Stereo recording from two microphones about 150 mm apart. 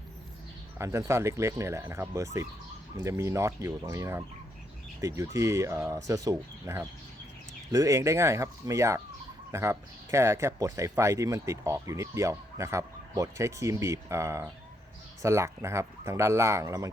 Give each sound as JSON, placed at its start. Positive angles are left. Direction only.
{"t": 0.8, "sound": "speech", "side_deg": -20}